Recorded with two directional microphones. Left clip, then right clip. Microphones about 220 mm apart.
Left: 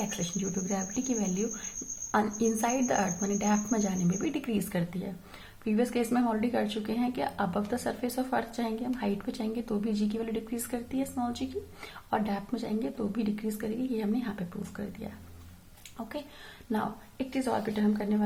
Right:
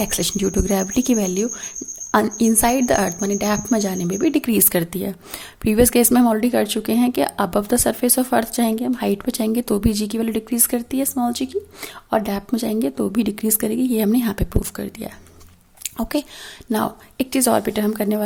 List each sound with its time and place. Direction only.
0.1 s speech: 55° right (ahead or behind)
15.8 s a sound: 50° right (ahead or behind)
16.7 s speech: 50° right (ahead or behind)